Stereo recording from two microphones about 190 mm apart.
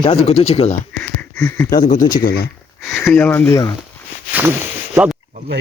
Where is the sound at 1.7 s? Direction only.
45° left (ahead or behind).